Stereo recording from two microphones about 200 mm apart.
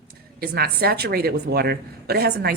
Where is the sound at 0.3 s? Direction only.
50° right (ahead or behind).